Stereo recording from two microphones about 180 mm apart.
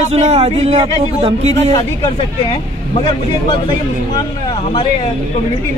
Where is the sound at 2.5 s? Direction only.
25° left (ahead or behind).